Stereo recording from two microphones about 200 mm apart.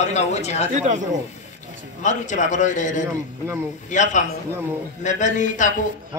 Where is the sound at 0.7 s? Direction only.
35° right (ahead or behind).